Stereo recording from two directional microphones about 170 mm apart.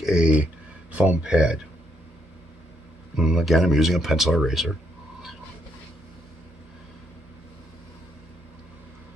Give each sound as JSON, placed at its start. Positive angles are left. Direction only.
{"t": 0.0, "sound": "speech", "side_deg": -5}
{"t": 3.2, "sound": "speech", "side_deg": 0}